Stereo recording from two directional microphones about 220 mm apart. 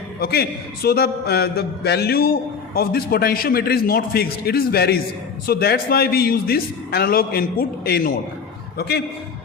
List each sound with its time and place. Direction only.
0.2 s a man's voice: 45° left (ahead or behind)